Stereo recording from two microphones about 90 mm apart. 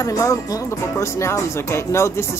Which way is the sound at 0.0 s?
35° left (ahead or behind).